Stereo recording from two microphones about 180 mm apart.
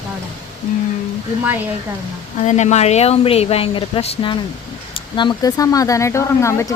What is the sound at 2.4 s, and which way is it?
Speech, 40° left (ahead or behind).